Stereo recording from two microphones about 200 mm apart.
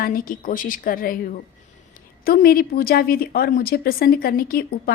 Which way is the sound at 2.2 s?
50° left (ahead or behind).